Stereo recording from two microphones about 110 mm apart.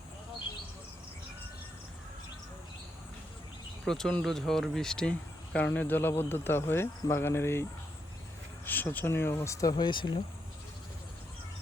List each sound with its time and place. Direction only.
3.8 s speech: 5° left (ahead or behind); by 7.6 s 20° left (ahead or behind)
8.6 s speech: 15° left (ahead or behind); by 10.2 s 45° left (ahead or behind)